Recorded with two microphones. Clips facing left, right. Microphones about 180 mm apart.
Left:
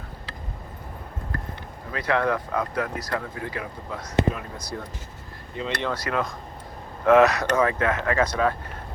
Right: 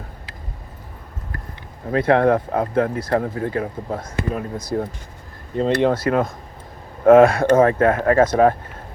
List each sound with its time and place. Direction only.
1.9 s speech: 50° right (ahead or behind)
2.5 s speech: 30° right (ahead or behind)
3.1 s speech: 45° right (ahead or behind)